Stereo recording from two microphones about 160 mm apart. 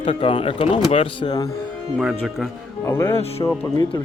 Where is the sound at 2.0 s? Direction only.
Centre (ahead or behind).